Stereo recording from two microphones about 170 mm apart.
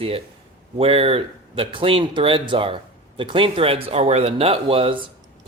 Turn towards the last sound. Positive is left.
turn(degrees=-35)  # may be behind; listen again after turning